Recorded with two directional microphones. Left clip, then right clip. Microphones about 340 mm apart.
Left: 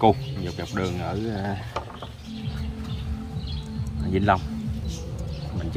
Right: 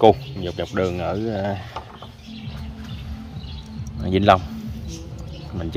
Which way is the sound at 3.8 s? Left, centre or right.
Right.